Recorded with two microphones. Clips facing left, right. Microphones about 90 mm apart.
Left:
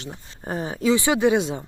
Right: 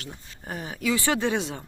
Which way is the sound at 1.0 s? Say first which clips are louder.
Left 6 dB; 15° left (ahead or behind).